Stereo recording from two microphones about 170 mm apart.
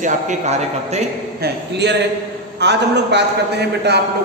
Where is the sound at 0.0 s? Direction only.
45° right (ahead or behind).